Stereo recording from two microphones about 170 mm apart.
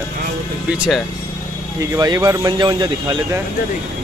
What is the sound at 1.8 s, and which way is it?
A man's voice, 20° right (ahead or behind).